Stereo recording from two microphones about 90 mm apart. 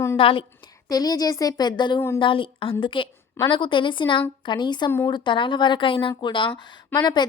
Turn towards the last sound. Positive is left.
turn(degrees=55)  # may be behind; listen again after turning